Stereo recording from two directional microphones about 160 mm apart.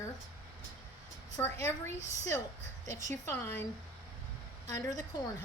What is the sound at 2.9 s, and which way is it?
Speech, 50° right (ahead or behind).